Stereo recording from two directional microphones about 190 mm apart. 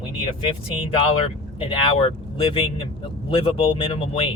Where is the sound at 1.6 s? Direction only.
25° left (ahead or behind).